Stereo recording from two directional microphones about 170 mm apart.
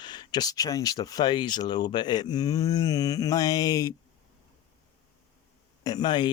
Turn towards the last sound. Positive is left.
turn(degrees=25)  # may be behind; listen again after turning